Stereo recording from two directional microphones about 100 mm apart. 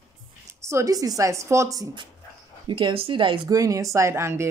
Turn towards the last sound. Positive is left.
turn(degrees=-25)  # may be behind; listen again after turning